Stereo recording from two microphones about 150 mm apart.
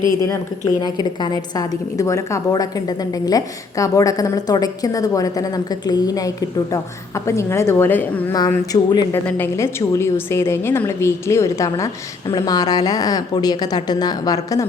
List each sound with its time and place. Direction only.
0.8 s a woman's voice: 25° left (ahead or behind)